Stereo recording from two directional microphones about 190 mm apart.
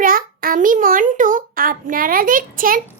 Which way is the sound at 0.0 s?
50° right (ahead or behind).